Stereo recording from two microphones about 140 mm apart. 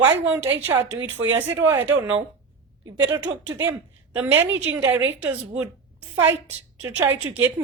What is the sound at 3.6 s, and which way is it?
A woman's voice, 15° right (ahead or behind).